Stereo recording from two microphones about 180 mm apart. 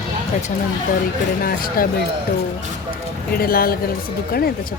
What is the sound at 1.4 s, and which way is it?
Speech, 55° left (ahead or behind).